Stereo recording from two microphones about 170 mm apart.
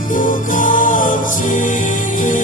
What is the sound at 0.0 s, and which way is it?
Music, 50° left (ahead or behind).